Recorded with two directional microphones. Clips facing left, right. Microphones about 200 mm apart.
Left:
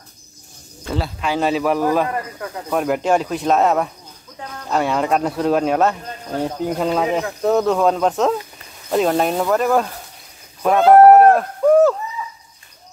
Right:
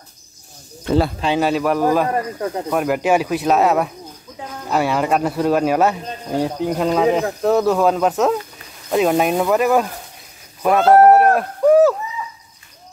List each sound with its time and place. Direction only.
1.4 s speech: centre (ahead or behind)
2.0 s speech: 35° right (ahead or behind)
2.7 s speech: centre (ahead or behind)
6.4 s speech: centre (ahead or behind)
11.1 s a sound: 5° right (ahead or behind)